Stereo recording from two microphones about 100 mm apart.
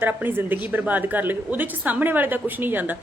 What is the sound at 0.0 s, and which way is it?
A woman's voice, 20° right (ahead or behind).